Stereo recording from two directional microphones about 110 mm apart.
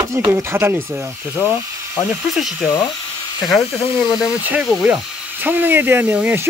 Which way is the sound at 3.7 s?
45° left (ahead or behind).